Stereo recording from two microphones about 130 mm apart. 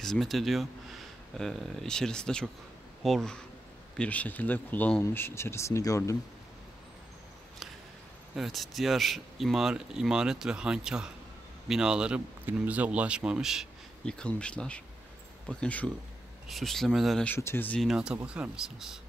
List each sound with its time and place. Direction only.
0.0 s speech: centre (ahead or behind); by 6.1 s 25° left (ahead or behind)
8.4 s speech: centre (ahead or behind)
14.0 s speech: 5° left (ahead or behind)
17.3 s speech: 15° left (ahead or behind)
17.7 s speech: 5° right (ahead or behind)